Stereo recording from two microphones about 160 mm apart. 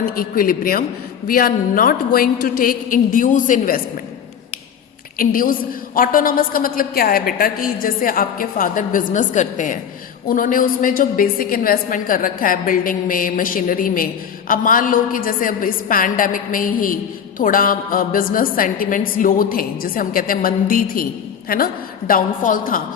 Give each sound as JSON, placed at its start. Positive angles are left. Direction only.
{"t": 0.0, "sound": "a woman's voice", "side_deg": 65}
{"t": 5.1, "sound": "a woman's voice", "side_deg": 60}